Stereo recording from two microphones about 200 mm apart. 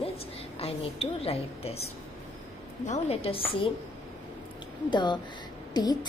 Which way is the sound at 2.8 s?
30° left (ahead or behind).